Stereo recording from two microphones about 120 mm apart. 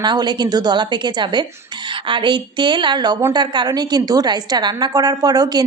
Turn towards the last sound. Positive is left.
turn(degrees=-35)  # may be behind; listen again after turning